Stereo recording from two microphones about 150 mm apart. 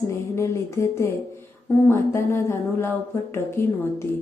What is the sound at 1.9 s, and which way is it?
Speech, 15° left (ahead or behind).